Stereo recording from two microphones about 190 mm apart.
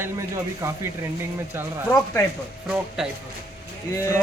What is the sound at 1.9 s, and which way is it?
Speech, 15° left (ahead or behind).